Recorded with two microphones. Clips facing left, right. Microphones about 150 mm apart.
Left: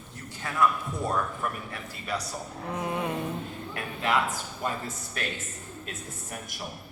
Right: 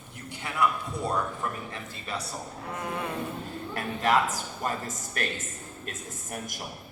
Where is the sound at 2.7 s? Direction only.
15° left (ahead or behind).